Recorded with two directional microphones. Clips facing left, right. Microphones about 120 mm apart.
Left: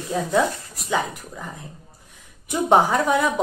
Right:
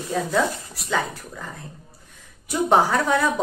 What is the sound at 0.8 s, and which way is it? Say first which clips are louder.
Speech: left 1 dB; 15° left (ahead or behind).